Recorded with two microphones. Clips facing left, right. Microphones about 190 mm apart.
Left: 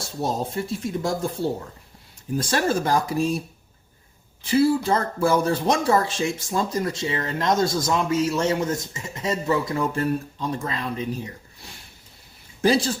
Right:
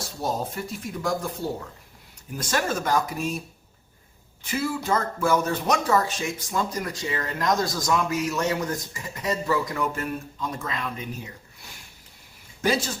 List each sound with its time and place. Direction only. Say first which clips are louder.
0.2 s speech: left 3 dB; 30° left (ahead or behind)
4.4 s speech: left 7 dB; 30° left (ahead or behind)
12.6 s speech: left 5 dB; 35° left (ahead or behind)